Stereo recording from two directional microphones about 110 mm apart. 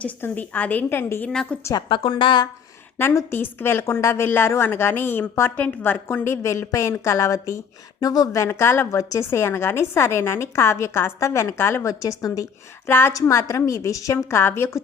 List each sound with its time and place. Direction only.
0.0 s a woman's voice: 15° left (ahead or behind)
1.3 s a woman's voice: 5° left (ahead or behind)
1.9 s a woman's voice: 50° left (ahead or behind)
3.0 s a woman's voice: 25° left (ahead or behind)
8.4 s a woman's voice: 25° left (ahead or behind)
12.9 s a woman's voice: 20° left (ahead or behind)